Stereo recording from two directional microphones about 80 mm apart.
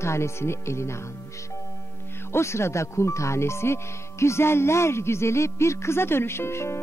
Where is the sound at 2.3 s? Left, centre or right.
Left.